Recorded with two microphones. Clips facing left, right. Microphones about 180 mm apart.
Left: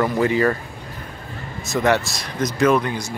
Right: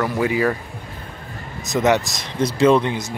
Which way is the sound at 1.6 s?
20° right (ahead or behind).